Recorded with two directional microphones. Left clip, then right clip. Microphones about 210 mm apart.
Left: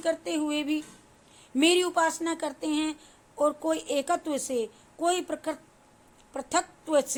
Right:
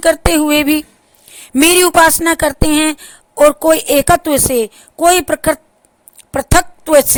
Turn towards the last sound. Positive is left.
turn(degrees=-50)  # may be behind; listen again after turning